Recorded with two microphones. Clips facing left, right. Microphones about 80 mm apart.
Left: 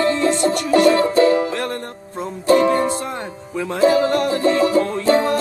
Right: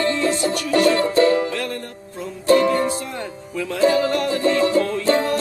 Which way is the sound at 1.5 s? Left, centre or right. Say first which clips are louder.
Left 2 dB; left.